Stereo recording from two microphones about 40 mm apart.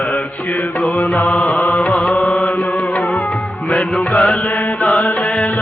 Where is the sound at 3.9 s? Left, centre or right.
Left.